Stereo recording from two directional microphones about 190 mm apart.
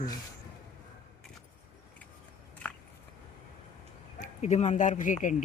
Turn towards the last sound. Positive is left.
turn(degrees=40)  # may be behind; listen again after turning